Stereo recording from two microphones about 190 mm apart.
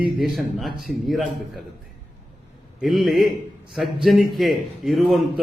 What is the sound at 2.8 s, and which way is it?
A man's voice, centre (ahead or behind).